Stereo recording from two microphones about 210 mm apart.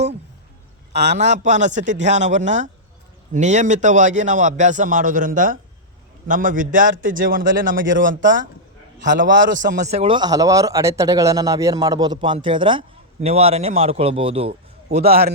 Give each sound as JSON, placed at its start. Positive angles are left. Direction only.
{"t": 1.0, "sound": "a man's voice", "side_deg": -35}
{"t": 15.0, "sound": "a man's voice", "side_deg": -45}